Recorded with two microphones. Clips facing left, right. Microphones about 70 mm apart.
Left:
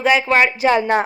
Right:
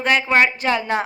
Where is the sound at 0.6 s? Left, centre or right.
Left.